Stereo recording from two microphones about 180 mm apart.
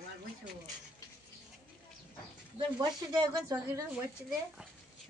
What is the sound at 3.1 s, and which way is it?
Speech, 20° right (ahead or behind).